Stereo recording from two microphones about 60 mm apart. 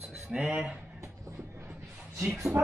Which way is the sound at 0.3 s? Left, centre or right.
Centre.